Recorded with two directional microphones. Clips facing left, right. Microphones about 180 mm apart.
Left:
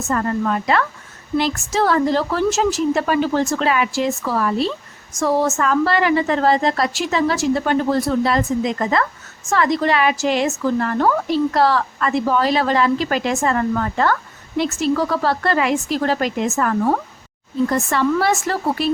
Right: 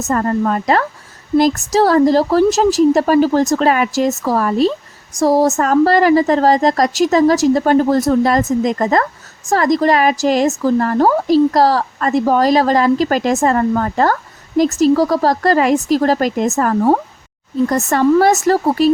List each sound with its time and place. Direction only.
0.0 s speech: 40° right (ahead or behind)